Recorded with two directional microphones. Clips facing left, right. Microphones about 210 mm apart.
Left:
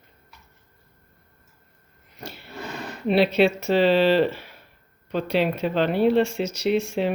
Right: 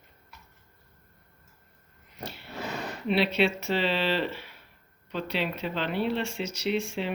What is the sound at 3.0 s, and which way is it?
Speech, 45° left (ahead or behind).